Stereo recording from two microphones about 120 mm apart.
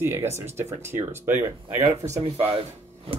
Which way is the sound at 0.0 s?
20° right (ahead or behind).